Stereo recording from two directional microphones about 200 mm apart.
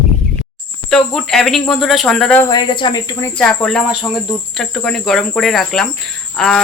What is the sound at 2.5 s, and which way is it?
Speech, 20° left (ahead or behind).